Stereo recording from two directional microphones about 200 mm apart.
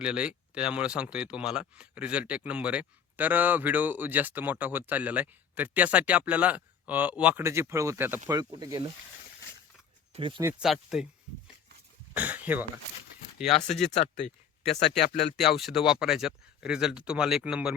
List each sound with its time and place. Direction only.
0.0 s speech: 5° right (ahead or behind); by 8.8 s 20° right (ahead or behind)
10.1 s speech: 25° right (ahead or behind)
10.6 s speech: 5° right (ahead or behind)
12.1 s speech: 10° right (ahead or behind)
13.7 s speech: centre (ahead or behind)
13.9 s speech: 35° left (ahead or behind)
15.4 s speech: centre (ahead or behind)